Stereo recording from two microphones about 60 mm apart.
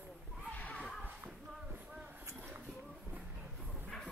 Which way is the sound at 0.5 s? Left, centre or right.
Left.